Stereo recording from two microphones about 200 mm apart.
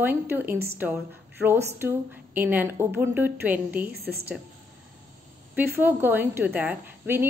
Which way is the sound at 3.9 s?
50° right (ahead or behind).